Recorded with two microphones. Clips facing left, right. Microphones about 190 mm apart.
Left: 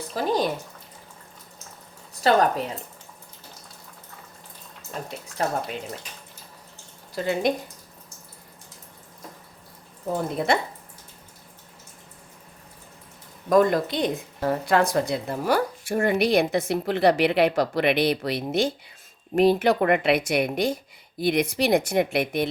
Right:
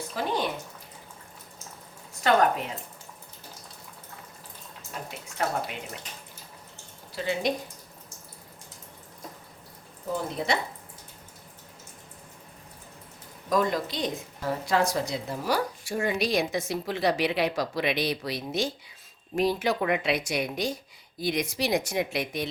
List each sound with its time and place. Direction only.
0.1 s speech: 40° left (ahead or behind)
2.2 s speech: 35° left (ahead or behind)
4.9 s speech: 35° left (ahead or behind)
7.2 s speech: 50° left (ahead or behind)
10.2 s speech: 55° left (ahead or behind)
13.5 s a woman's voice: 50° left (ahead or behind)